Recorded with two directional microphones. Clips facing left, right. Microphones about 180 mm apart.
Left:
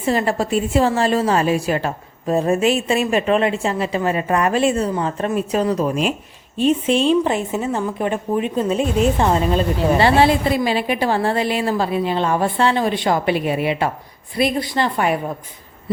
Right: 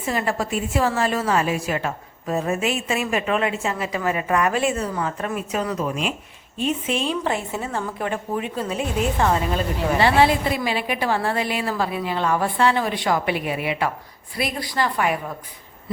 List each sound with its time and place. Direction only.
0.0 s a woman's voice: 30° left (ahead or behind)